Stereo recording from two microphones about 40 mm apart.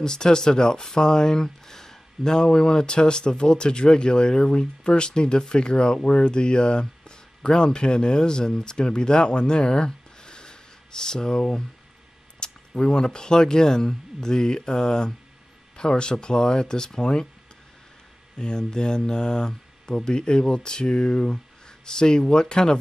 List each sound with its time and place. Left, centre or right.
0.0 s speech: centre
18.4 s speech: centre